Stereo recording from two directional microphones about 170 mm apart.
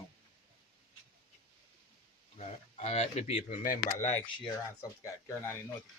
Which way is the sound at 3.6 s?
50° left (ahead or behind).